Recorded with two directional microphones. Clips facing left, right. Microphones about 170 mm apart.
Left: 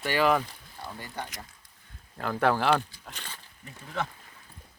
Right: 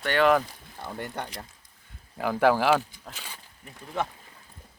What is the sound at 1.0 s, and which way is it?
Speech, 65° right (ahead or behind).